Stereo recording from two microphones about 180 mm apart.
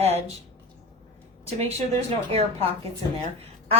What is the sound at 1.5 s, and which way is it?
A woman's voice, 35° right (ahead or behind).